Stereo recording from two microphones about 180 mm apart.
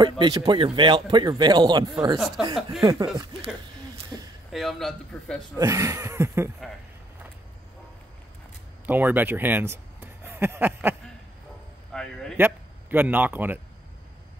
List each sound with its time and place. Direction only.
0.0 s speech: 25° right (ahead or behind)
2.1 s a man's voice: centre (ahead or behind)
2.8 s speech: 20° right (ahead or behind)
4.5 s a man's voice: centre (ahead or behind)
5.6 s speech: 15° right (ahead or behind)
8.8 s speech: 10° right (ahead or behind)
10.2 s a sound: 10° right (ahead or behind)
11.9 s a man's voice: 5° left (ahead or behind)
12.4 s a man's voice: 10° right (ahead or behind)